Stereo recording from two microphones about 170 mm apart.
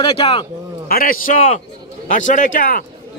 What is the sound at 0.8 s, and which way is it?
A man's voice, 60° left (ahead or behind).